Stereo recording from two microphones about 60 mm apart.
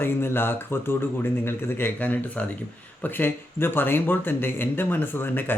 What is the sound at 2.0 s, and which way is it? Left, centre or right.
Speech, left.